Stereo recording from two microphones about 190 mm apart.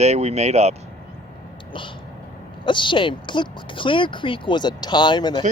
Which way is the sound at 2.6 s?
25° left (ahead or behind).